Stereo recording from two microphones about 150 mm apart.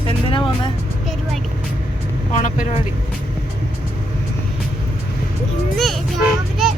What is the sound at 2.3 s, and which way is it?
Vehicle, 60° left (ahead or behind).